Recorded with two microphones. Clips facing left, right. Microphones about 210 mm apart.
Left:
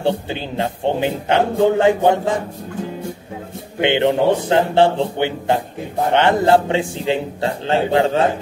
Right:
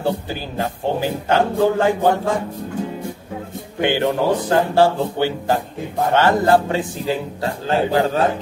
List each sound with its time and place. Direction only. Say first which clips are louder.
0.0 s a man's voice: left 2 dB; 25° left (ahead or behind)
3.8 s a man's voice: left 3 dB; 25° left (ahead or behind)